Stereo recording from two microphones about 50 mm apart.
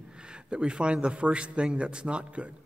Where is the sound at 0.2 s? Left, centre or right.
Centre.